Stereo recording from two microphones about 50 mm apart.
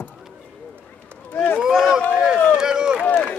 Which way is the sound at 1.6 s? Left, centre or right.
Centre.